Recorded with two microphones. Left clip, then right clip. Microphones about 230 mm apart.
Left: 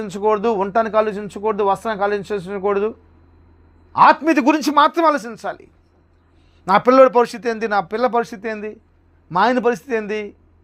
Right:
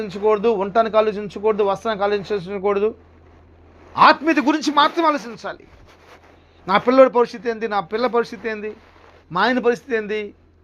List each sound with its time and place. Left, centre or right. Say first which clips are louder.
0.0 s speech: even; left
3.9 s speech: left 1 dB; left
6.7 s speech: left 2 dB; left